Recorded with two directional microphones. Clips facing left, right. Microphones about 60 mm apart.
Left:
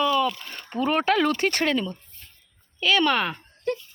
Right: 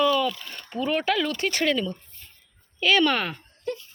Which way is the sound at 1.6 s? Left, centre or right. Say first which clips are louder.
Even; centre.